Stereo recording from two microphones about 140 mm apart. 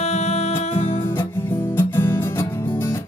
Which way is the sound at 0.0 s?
50° left (ahead or behind).